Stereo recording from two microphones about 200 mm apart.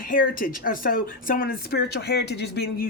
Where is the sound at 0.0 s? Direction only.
45° left (ahead or behind).